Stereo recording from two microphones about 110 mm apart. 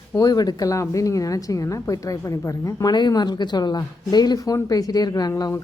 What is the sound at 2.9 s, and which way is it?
Speech, 40° left (ahead or behind).